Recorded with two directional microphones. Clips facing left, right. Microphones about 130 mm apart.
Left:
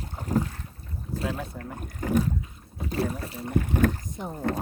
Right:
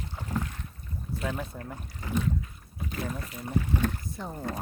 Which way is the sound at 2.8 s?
35° left (ahead or behind).